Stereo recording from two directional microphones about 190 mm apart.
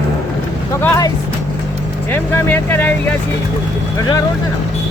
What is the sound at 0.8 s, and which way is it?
Speech, 20° left (ahead or behind).